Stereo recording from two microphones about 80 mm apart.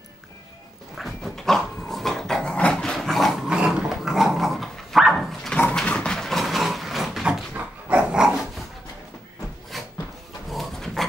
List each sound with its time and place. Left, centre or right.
0.9 s dog: centre
3.4 s dog: centre
5.5 s a sound: centre
8.0 s dog: centre
9.7 s a sound: centre
10.5 s dog: centre